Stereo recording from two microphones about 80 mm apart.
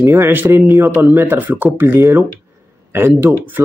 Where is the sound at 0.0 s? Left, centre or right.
Right.